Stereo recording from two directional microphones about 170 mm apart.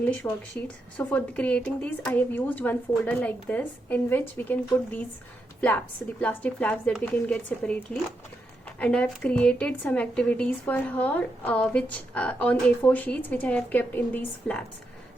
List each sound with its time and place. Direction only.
0.0 s a woman's voice: 10° left (ahead or behind)
8.8 s speech: 5° left (ahead or behind)